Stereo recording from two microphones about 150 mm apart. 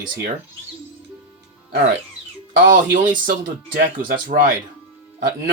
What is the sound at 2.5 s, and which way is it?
Speech, 65° right (ahead or behind).